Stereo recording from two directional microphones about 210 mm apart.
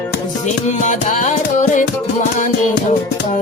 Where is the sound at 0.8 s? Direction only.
35° left (ahead or behind).